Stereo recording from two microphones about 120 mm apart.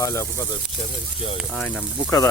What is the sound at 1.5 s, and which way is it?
Speech, 10° left (ahead or behind).